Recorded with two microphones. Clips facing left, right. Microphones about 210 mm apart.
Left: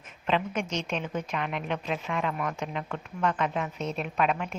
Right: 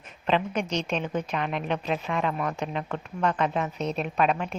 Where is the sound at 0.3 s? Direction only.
35° right (ahead or behind).